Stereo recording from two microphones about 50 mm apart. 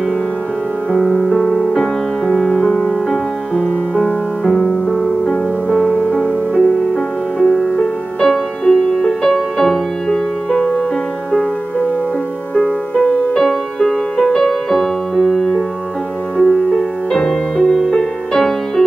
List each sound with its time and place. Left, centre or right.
0.9 s music: centre
12.5 s music: centre